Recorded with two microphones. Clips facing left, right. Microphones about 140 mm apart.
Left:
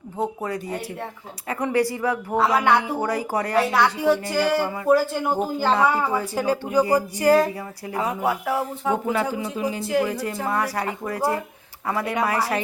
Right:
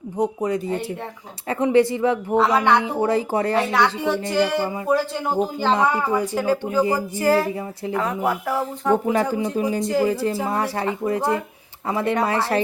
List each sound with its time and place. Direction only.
0.2 s speech: 20° right (ahead or behind)
2.3 s speech: 5° left (ahead or behind)
2.8 s speech: 25° right (ahead or behind)
3.5 s speech: centre (ahead or behind)
5.7 s speech: 15° right (ahead or behind)
6.4 s speech: 15° left (ahead or behind)
8.3 s speech: centre (ahead or behind)
9.3 s speech: 40° right (ahead or behind)
9.8 s speech: 5° left (ahead or behind)
10.5 s speech: 25° right (ahead or behind)